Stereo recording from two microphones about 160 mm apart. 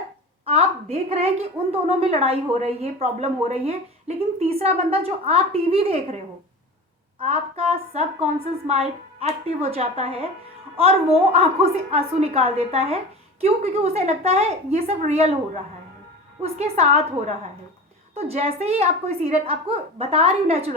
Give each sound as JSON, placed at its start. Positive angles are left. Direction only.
{"t": 0.4, "sound": "a sound", "side_deg": -40}
{"t": 1.9, "sound": "a woman's voice", "side_deg": -40}
{"t": 7.2, "sound": "a woman's voice", "side_deg": -40}
{"t": 16.4, "sound": "a woman's voice", "side_deg": -40}